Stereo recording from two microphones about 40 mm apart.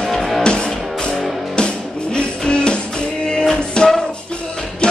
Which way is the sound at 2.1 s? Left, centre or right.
Left.